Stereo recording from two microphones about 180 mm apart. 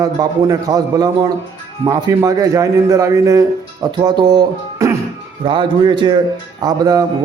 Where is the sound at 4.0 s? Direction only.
20° right (ahead or behind).